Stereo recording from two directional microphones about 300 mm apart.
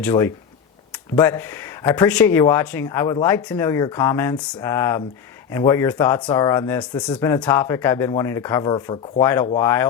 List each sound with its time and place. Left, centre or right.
0.0 s speech: centre